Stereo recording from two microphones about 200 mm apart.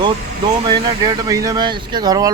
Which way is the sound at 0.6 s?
20° right (ahead or behind).